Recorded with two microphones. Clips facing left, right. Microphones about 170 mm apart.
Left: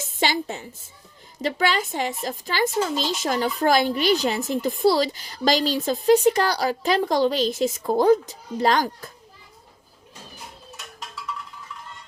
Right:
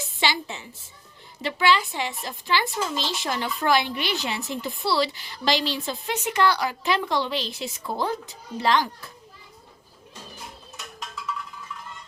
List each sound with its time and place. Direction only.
0.0 s a woman's voice: 45° left (ahead or behind)